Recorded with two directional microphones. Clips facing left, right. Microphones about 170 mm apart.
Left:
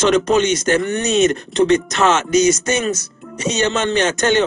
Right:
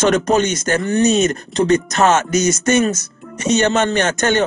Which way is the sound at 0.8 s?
35° right (ahead or behind).